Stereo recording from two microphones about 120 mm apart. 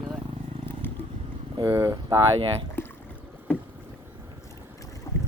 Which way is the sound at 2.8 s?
20° left (ahead or behind).